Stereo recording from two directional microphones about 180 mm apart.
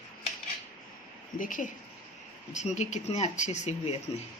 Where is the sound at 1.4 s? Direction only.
45° left (ahead or behind).